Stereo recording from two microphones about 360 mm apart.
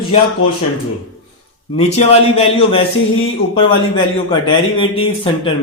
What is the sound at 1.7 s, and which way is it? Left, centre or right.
A man's voice, centre.